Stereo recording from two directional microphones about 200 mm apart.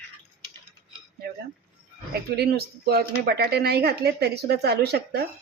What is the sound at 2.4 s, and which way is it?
Speech, 55° right (ahead or behind).